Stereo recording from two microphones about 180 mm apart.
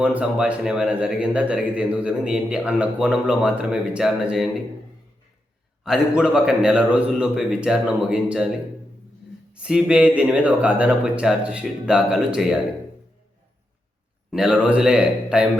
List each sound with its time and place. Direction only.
0.0 s a man's voice: 5° right (ahead or behind)
5.8 s a man's voice: 5° right (ahead or behind)
9.5 s a man's voice: 5° right (ahead or behind)
14.3 s a man's voice: centre (ahead or behind)